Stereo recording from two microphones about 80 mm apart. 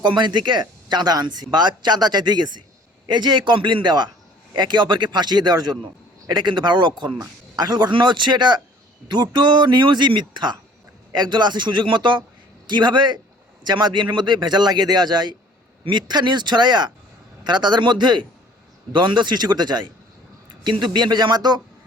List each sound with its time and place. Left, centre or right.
0.0 s speech: right
7.5 s speech: right
12.6 s speech: right